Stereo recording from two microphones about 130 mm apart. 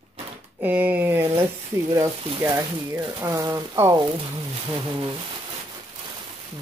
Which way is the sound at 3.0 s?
25° right (ahead or behind).